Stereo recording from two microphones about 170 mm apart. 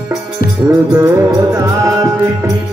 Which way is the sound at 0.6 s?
20° right (ahead or behind).